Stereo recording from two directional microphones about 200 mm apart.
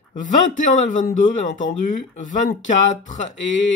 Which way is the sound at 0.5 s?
40° left (ahead or behind).